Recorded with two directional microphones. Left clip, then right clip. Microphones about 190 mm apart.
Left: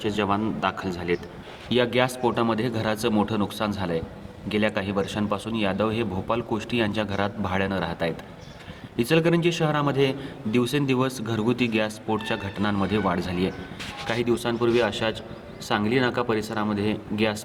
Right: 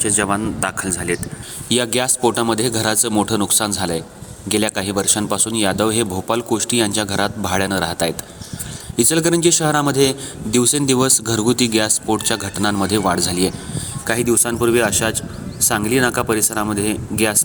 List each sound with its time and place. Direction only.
0.0 s speech: 30° right (ahead or behind)
1.7 s a man's voice: 45° right (ahead or behind)